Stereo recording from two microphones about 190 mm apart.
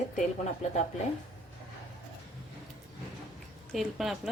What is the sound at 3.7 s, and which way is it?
Speech, centre (ahead or behind).